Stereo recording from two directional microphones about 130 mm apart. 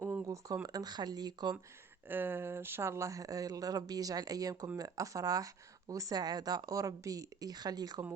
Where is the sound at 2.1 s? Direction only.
15° right (ahead or behind).